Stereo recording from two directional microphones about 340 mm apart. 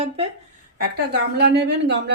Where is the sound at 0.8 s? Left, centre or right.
Right.